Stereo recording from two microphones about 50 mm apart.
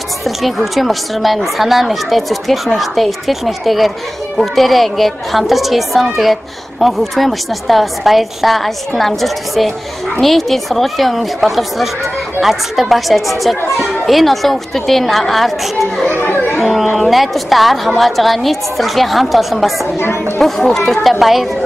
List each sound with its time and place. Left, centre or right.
0.2 s speech: centre
16.1 s chatter: left
16.5 s speech: centre